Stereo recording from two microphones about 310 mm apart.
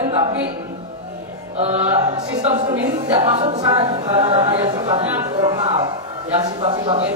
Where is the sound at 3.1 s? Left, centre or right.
Centre.